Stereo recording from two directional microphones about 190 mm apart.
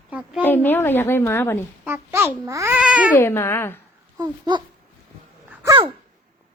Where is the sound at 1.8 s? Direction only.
15° right (ahead or behind).